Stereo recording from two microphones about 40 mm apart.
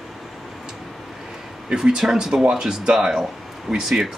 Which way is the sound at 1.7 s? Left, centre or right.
Centre.